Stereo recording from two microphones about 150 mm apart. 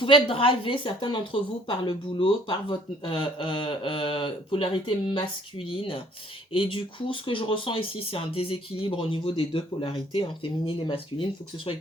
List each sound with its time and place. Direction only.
0.0 s a woman's voice: 35° left (ahead or behind)